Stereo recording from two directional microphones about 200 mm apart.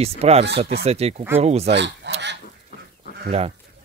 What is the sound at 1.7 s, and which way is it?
Goose, 60° right (ahead or behind).